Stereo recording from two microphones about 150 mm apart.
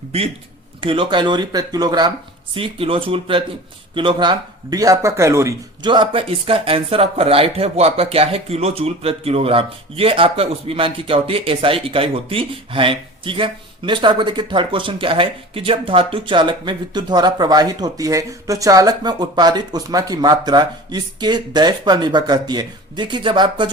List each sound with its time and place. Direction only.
0.8 s speech: 35° right (ahead or behind)
2.6 s speech: 35° right (ahead or behind); by 5.5 s 20° right (ahead or behind)
5.8 s speech: 30° right (ahead or behind)